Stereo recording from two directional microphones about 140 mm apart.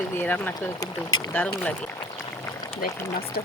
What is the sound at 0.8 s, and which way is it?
Speech, 25° left (ahead or behind).